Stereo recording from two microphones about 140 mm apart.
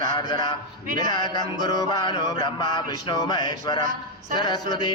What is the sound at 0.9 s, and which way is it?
Speech, 65° right (ahead or behind).